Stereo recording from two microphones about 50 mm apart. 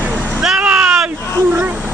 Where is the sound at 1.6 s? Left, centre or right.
Right.